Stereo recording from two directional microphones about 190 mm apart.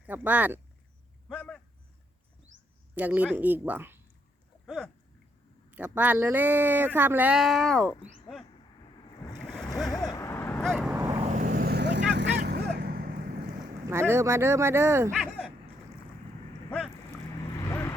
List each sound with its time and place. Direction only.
0.0 s speech: 10° right (ahead or behind)
1.3 s a sound: 5° left (ahead or behind)
2.9 s a woman's voice: 10° right (ahead or behind)
4.6 s a sound: centre (ahead or behind)
5.7 s speech: 10° right (ahead or behind)
9.4 s a sound: 5° left (ahead or behind)
9.9 s vehicle: 20° left (ahead or behind)
10.6 s boat: centre (ahead or behind)
10.9 s vehicle: 15° right (ahead or behind)
11.3 s vehicle: 45° right (ahead or behind)
13.9 s speech: 15° right (ahead or behind)
15.1 s a sound: centre (ahead or behind)
17.6 s vehicle: 15° left (ahead or behind)